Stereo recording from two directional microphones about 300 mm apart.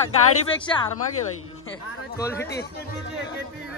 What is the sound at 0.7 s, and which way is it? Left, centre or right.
Speech, centre.